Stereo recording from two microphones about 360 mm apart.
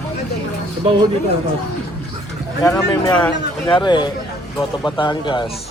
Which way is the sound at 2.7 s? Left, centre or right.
Centre.